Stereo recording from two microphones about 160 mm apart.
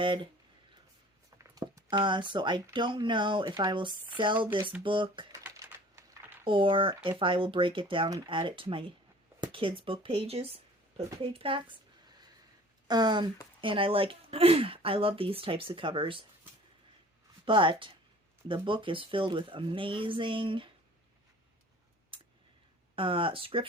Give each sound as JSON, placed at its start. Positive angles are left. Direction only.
{"t": 0.0, "sound": "speech", "side_deg": -30}
{"t": 1.5, "sound": "speech", "side_deg": -25}
{"t": 5.3, "sound": "typing", "side_deg": -20}
{"t": 6.4, "sound": "speech", "side_deg": -35}
{"t": 12.9, "sound": "speech", "side_deg": -25}
{"t": 17.4, "sound": "speech", "side_deg": -30}
{"t": 22.1, "sound": "a sound", "side_deg": -35}
{"t": 23.0, "sound": "speech", "side_deg": -35}